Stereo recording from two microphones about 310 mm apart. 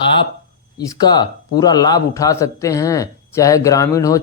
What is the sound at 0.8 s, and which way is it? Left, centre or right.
Speech, centre.